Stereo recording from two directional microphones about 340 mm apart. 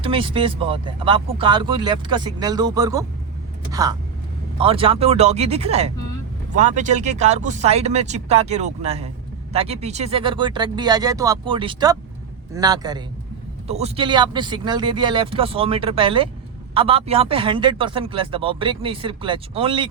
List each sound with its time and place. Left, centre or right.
0.0 s a man's voice: centre